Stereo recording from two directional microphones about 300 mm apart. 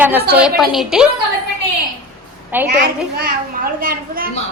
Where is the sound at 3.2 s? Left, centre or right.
Right.